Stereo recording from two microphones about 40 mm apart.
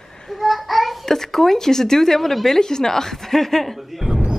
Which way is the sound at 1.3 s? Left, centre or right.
Centre.